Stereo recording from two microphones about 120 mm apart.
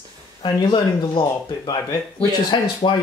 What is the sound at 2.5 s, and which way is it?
Speech, 40° left (ahead or behind).